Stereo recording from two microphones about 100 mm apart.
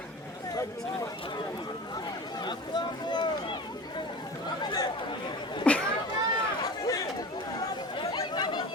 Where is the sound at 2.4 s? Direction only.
50° left (ahead or behind).